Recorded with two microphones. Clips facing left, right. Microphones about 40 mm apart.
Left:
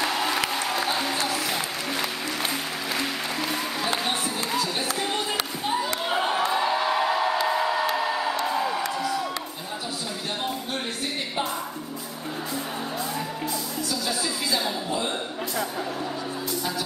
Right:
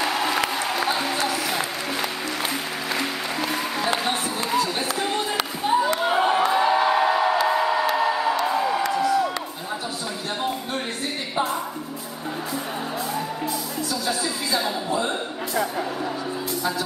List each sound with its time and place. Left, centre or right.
0.0 s music: centre
6.0 s a sound: centre
8.5 s music: centre
9.0 s crowd: centre
14.0 s music: centre